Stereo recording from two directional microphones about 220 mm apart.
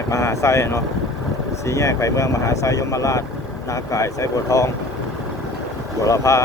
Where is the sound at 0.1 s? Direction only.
15° left (ahead or behind).